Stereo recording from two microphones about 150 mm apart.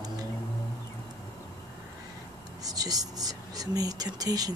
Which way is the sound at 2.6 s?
25° right (ahead or behind).